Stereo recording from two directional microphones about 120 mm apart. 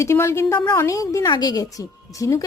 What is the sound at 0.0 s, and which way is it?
A woman's voice, 20° left (ahead or behind).